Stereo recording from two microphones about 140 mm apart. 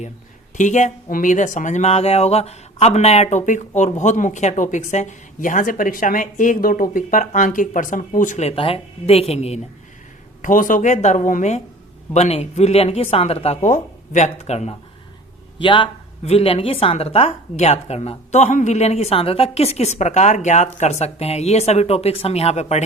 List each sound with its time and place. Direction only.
0.5 s speech: 60° left (ahead or behind); by 6.8 s 85° left
6.9 s speech: 70° left (ahead or behind)
8.4 s speech: 40° left (ahead or behind)
10.4 s speech: 70° left (ahead or behind); by 14.8 s 50° left (ahead or behind)
15.6 s speech: 35° left (ahead or behind)